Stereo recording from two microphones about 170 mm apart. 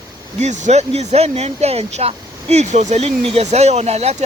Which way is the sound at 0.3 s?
45° right (ahead or behind).